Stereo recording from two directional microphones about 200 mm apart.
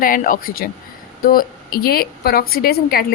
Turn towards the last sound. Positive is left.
turn(degrees=50)  # may be behind; listen again after turning